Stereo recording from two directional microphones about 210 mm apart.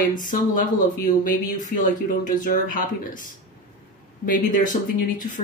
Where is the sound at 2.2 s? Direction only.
40° left (ahead or behind).